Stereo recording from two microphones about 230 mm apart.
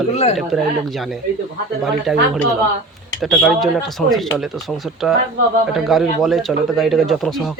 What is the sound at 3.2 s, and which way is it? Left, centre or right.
Speech, centre.